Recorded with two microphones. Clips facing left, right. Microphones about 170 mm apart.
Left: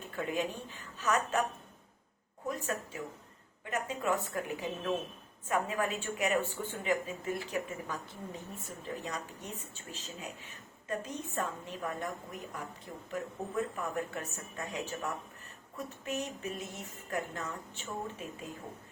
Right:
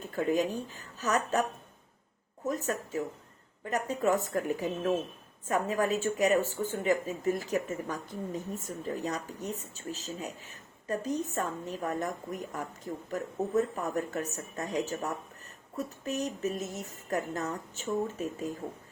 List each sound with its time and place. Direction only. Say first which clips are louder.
0.1 s a woman's voice: right 6 dB; 40° right (ahead or behind)
2.5 s a woman's voice: right 4 dB; 40° right (ahead or behind)